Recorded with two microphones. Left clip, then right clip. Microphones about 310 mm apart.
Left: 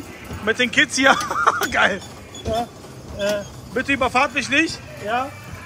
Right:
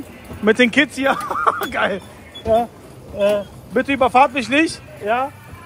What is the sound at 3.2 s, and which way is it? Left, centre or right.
Speech, centre.